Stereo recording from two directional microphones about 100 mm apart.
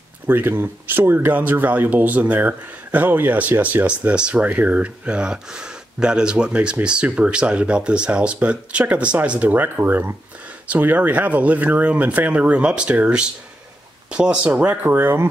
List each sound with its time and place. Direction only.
0.3 s speech: 20° right (ahead or behind)